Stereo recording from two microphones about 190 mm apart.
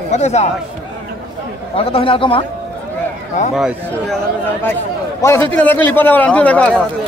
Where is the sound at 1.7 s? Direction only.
30° left (ahead or behind).